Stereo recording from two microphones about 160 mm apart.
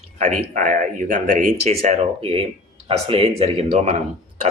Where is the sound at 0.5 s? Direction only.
55° right (ahead or behind).